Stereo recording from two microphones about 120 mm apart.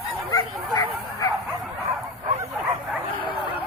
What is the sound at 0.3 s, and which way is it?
Bow-wow, 35° left (ahead or behind).